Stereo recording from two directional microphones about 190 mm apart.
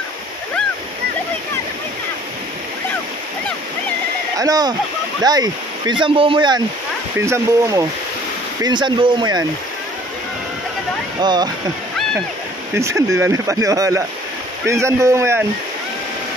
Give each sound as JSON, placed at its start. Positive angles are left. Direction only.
{"t": 4.4, "sound": "speech", "side_deg": -20}
{"t": 7.2, "sound": "speech", "side_deg": -15}
{"t": 11.1, "sound": "speech", "side_deg": -20}
{"t": 12.7, "sound": "speech", "side_deg": -15}